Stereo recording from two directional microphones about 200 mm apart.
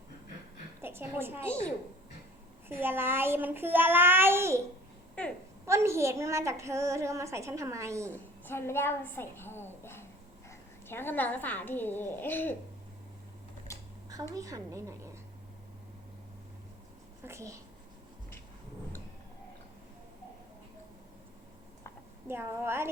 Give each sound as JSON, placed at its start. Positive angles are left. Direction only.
{"t": 0.8, "sound": "a woman's voice", "side_deg": -10}
{"t": 2.6, "sound": "a woman's voice", "side_deg": -10}
{"t": 5.2, "sound": "a woman's voice", "side_deg": 5}
{"t": 5.6, "sound": "a woman's voice", "side_deg": -15}
{"t": 8.1, "sound": "a woman's voice", "side_deg": 10}
{"t": 13.7, "sound": "a sound", "side_deg": 15}
{"t": 14.3, "sound": "a woman's voice", "side_deg": -15}
{"t": 17.2, "sound": "a woman's voice", "side_deg": -15}
{"t": 22.3, "sound": "a woman's voice", "side_deg": -10}